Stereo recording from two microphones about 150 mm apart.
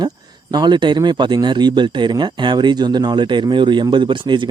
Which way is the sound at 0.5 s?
30° right (ahead or behind).